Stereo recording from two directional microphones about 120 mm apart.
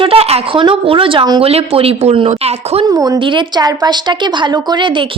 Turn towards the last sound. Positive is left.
turn(degrees=-40)  # may be behind; listen again after turning